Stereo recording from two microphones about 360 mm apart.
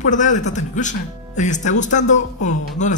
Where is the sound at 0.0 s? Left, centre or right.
Left.